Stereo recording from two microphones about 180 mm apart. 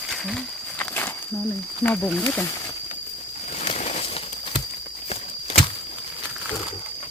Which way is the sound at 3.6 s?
40° left (ahead or behind).